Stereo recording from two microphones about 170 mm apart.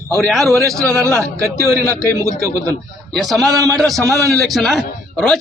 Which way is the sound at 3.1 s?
Centre (ahead or behind).